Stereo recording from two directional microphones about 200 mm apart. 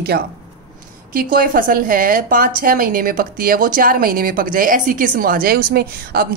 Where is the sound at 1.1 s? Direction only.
45° right (ahead or behind).